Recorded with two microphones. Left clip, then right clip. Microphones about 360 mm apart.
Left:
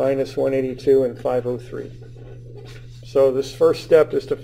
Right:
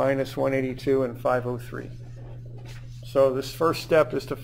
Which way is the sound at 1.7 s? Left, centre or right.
Right.